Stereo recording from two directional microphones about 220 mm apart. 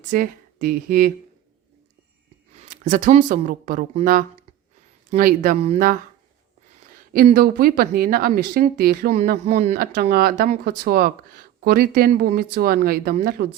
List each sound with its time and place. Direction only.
0.1 s speech: 40° right (ahead or behind)
2.6 s speech: 35° right (ahead or behind)
7.1 s speech: 40° right (ahead or behind)